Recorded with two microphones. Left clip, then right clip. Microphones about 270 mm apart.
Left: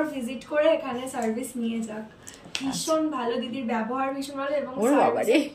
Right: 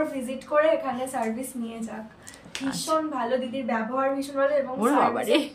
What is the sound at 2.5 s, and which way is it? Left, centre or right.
Speech, centre.